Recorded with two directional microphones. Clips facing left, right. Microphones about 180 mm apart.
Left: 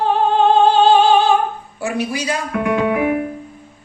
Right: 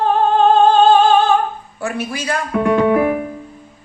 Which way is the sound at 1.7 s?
15° left (ahead or behind).